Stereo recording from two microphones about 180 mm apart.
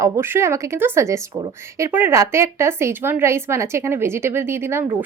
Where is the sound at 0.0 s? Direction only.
15° right (ahead or behind).